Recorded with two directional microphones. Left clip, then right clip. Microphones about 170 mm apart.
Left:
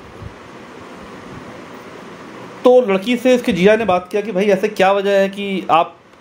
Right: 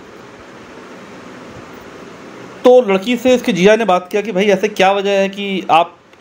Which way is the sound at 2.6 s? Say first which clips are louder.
Right 2 dB; 10° right (ahead or behind).